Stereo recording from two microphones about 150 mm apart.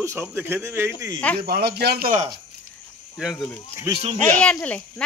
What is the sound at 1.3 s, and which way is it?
Speech, 90° right.